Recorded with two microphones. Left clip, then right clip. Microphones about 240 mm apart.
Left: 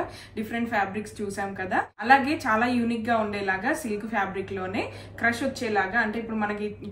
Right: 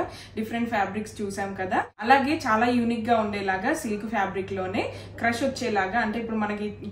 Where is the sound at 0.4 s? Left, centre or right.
Centre.